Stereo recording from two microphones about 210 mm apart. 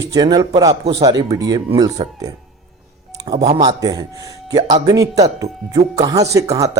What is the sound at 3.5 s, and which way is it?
Speech, 20° right (ahead or behind).